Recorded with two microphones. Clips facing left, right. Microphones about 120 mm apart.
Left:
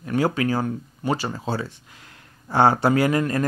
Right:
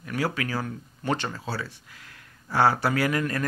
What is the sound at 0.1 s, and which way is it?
Speech, 25° left (ahead or behind).